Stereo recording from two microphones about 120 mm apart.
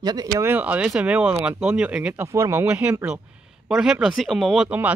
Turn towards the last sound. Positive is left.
turn(degrees=-10)  # may be behind; listen again after turning